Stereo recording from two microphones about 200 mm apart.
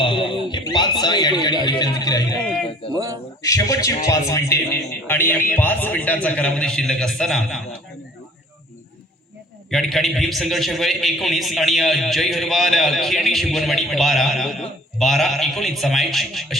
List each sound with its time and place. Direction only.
0.0 s a sound: 25° left (ahead or behind)
1.6 s a man's voice: 20° left (ahead or behind)
2.9 s speech: 15° right (ahead or behind)
3.4 s a man's voice: 15° left (ahead or behind)
9.6 s a man's voice: centre (ahead or behind)